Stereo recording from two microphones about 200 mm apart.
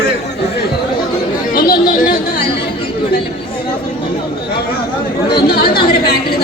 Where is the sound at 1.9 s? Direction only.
45° left (ahead or behind).